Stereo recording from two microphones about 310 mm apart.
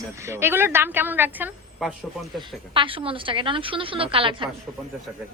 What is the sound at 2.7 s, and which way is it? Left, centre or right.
A man's voice, centre.